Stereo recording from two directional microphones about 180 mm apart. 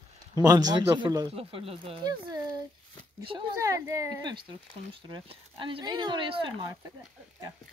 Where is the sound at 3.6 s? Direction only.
15° right (ahead or behind).